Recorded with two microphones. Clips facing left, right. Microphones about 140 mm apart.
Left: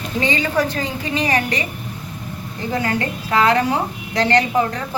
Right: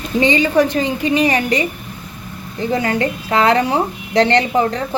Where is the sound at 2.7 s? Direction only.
20° right (ahead or behind).